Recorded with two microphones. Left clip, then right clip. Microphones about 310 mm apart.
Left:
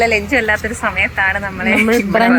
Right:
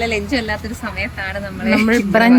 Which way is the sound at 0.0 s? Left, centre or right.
Centre.